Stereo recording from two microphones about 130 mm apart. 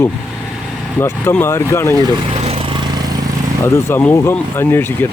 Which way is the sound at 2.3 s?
50° right (ahead or behind).